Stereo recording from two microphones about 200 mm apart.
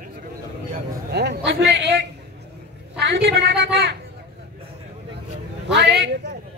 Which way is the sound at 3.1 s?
50° right (ahead or behind).